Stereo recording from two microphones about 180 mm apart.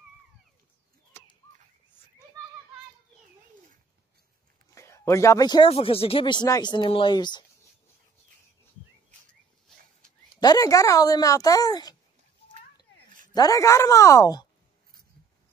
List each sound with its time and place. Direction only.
1.1 s a sound: 15° left (ahead or behind)
4.7 s a man's voice: 15° left (ahead or behind)
10.3 s a woman's voice: 20° left (ahead or behind)
13.3 s speech: 20° left (ahead or behind)